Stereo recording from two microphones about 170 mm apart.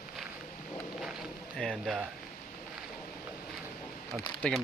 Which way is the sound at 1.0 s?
Centre (ahead or behind).